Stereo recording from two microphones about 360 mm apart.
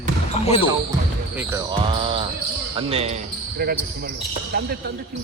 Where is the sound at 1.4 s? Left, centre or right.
Centre.